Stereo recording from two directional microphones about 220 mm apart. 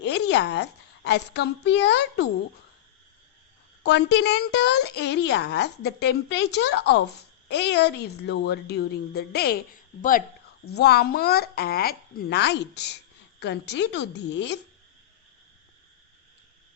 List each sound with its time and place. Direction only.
0.0 s a woman's voice: 50° left (ahead or behind)
3.8 s a woman's voice: 55° left (ahead or behind)